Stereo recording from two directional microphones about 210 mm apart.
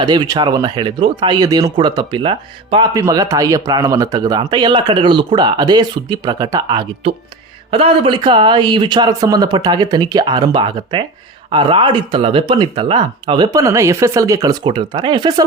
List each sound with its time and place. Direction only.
0.0 s speech: 20° right (ahead or behind)
3.0 s speech: 15° right (ahead or behind)